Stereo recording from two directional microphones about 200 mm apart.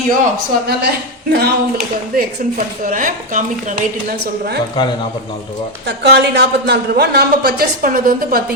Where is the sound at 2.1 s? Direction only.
45° right (ahead or behind).